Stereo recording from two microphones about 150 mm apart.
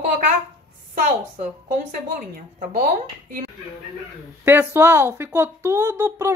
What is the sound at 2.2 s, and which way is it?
Speech, 80° right.